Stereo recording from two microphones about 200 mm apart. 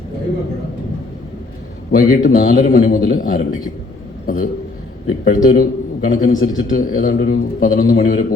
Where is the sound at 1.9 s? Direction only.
50° left (ahead or behind).